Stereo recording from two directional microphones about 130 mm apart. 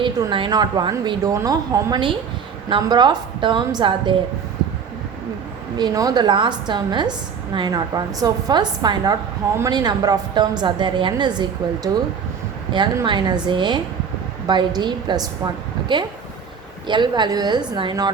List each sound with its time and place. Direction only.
0.0 s a woman's voice: 40° right (ahead or behind)
5.7 s a woman's voice: 30° right (ahead or behind)
13.1 s a woman's voice: 35° right (ahead or behind)